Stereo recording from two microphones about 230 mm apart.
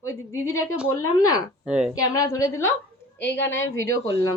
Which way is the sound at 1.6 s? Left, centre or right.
Centre.